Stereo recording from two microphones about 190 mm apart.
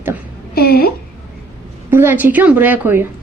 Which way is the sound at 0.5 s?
55° left (ahead or behind).